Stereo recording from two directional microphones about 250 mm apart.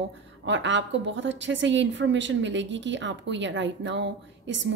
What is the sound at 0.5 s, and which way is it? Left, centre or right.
A woman's voice, right.